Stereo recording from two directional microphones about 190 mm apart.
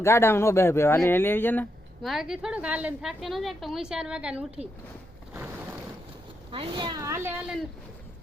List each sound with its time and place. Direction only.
0.0 s speech: 15° left (ahead or behind)
2.0 s a woman's voice: centre (ahead or behind)
6.5 s a woman's voice: 25° right (ahead or behind)